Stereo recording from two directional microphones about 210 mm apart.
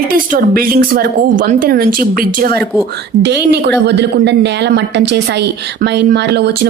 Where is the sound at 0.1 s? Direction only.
45° right (ahead or behind).